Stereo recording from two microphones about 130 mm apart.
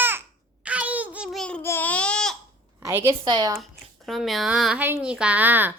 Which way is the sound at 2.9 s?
20° right (ahead or behind).